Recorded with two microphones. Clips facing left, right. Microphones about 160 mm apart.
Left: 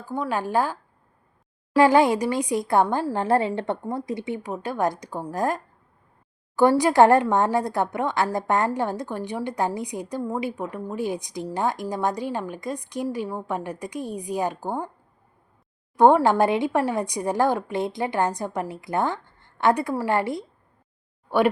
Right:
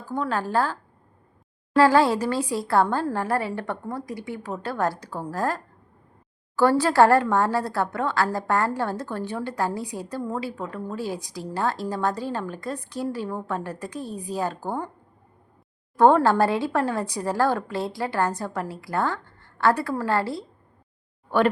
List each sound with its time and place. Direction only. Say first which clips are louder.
0.1 s a woman's voice: even; 10° left (ahead or behind)
16.0 s a woman's voice: left 1 dB; 15° left (ahead or behind)